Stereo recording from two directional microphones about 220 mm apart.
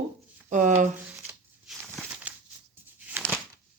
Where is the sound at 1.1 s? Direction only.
10° right (ahead or behind).